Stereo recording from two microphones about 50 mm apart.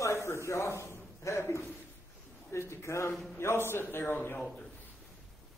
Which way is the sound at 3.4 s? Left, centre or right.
Left.